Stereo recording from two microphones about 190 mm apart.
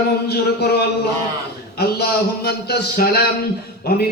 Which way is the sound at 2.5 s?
55° left (ahead or behind).